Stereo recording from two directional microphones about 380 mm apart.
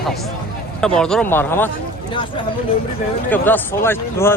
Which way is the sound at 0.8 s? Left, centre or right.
Centre.